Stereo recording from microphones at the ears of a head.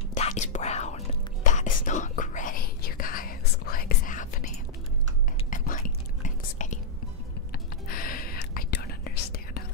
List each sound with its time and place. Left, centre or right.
0.2 s whispering: left